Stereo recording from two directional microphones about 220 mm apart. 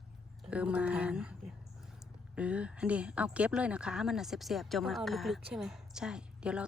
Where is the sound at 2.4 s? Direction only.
5° right (ahead or behind).